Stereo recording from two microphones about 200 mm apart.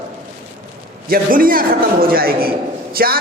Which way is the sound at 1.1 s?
45° right (ahead or behind).